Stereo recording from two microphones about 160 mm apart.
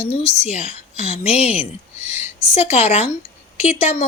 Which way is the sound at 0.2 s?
40° left (ahead or behind).